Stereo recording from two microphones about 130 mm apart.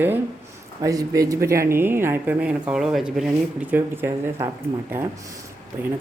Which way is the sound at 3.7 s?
15° right (ahead or behind).